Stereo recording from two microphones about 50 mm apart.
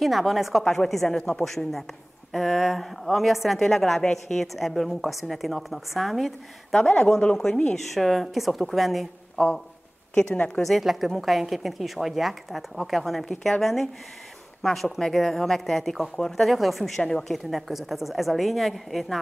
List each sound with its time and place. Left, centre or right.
0.0 s a woman's voice: centre
7.0 s speech: centre
7.7 s a woman's voice: centre
10.3 s a woman's voice: left
10.6 s a woman's voice: centre
16.4 s a woman's voice: centre
17.3 s a woman's voice: centre